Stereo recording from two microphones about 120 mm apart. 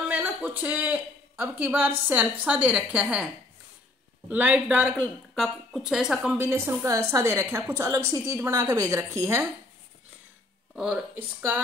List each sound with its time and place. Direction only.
0.1 s a woman's voice: 15° right (ahead or behind)
4.3 s a woman's voice: 10° right (ahead or behind)
6.3 s a woman's voice: 15° right (ahead or behind)
10.8 s a woman's voice: 10° right (ahead or behind)